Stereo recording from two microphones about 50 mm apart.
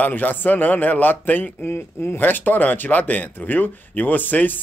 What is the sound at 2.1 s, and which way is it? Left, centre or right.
A man's voice, left.